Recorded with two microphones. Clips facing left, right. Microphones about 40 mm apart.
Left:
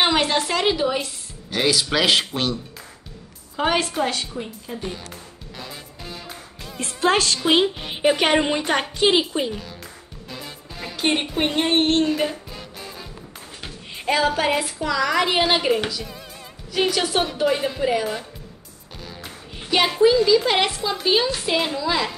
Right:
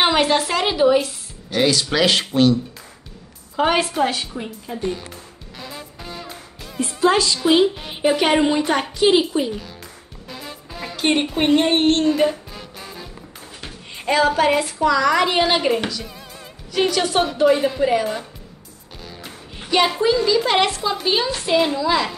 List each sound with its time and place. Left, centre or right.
0.0 s a woman's voice: centre
3.5 s a woman's voice: centre
5.6 s music: centre
6.8 s speech: left
7.8 s a woman's voice: centre
8.3 s a woman's voice: centre
8.9 s a woman's voice: left
9.5 s a woman's voice: centre
10.3 s music: centre
13.6 s a woman's voice: centre